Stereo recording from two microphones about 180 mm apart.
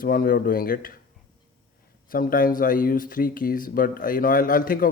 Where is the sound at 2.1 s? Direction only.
50° left (ahead or behind).